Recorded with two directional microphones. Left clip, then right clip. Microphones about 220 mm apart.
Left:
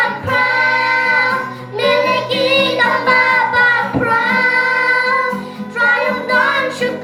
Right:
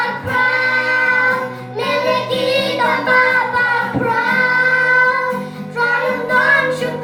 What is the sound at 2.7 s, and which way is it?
Music, 45° left (ahead or behind).